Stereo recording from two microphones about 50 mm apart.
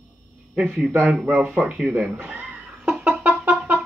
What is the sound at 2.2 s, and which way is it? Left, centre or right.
Chuckle, right.